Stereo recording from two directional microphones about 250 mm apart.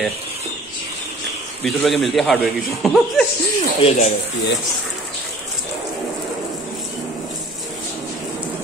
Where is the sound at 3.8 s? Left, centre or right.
Left.